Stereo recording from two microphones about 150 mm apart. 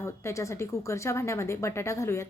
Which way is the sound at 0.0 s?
20° left (ahead or behind).